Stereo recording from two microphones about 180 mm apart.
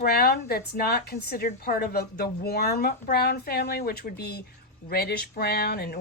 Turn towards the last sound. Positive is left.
turn(degrees=60)  # may be behind; listen again after turning